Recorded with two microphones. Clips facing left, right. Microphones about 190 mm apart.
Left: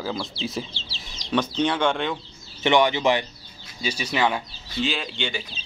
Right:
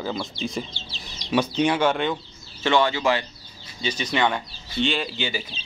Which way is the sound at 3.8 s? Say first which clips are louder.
Even; 10° left (ahead or behind).